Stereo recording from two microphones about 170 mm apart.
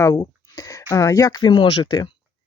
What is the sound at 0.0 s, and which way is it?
Speech, 20° left (ahead or behind).